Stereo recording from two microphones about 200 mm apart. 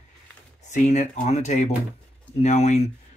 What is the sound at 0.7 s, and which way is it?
Speech, 35° left (ahead or behind).